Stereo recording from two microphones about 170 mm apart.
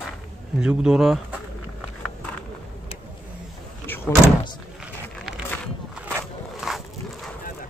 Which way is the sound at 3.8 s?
10° left (ahead or behind).